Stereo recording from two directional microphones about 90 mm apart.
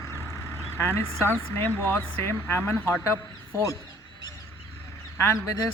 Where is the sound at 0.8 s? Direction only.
30° left (ahead or behind).